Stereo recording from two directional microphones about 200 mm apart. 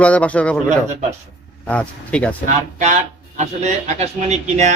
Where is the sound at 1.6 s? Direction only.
5° left (ahead or behind).